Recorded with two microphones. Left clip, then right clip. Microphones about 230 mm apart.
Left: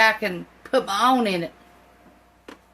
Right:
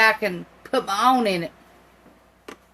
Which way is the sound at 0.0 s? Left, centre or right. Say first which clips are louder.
Right 1 dB; centre.